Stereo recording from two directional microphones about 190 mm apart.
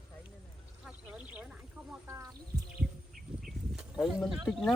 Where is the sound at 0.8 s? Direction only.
5° right (ahead or behind).